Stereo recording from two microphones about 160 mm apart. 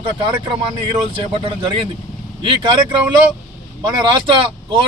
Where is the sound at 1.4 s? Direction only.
35° right (ahead or behind).